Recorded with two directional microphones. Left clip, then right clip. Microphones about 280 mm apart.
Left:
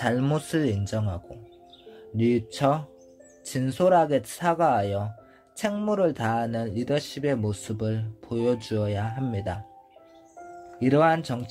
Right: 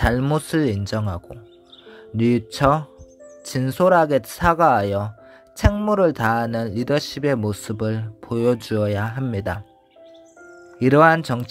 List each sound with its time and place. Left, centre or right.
0.0 s speech: centre
10.8 s speech: right